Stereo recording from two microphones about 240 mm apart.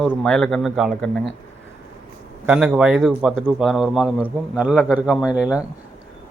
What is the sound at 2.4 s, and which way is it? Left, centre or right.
A man's voice, centre.